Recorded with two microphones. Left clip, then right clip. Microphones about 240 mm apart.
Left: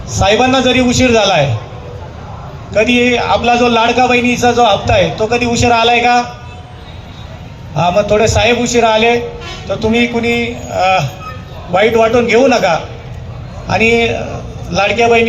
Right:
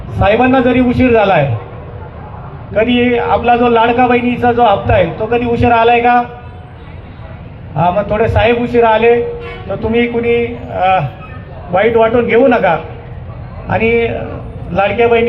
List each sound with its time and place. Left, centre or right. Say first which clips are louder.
0.2 s a man's voice: even; left
2.7 s a man's voice: left 1 dB; left
7.8 s a man's voice: left 2 dB; left